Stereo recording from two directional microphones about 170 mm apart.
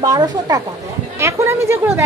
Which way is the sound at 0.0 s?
20° right (ahead or behind).